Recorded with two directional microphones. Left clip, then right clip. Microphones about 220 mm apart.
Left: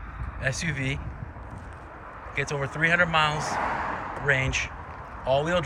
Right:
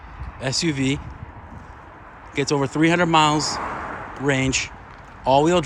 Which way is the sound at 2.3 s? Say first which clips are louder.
Right 8 dB; 15° right (ahead or behind).